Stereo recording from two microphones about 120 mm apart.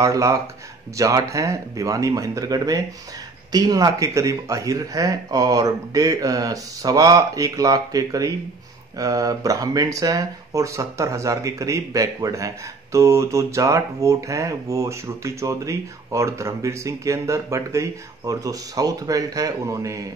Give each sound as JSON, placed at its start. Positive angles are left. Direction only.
{"t": 0.0, "sound": "speech", "side_deg": -25}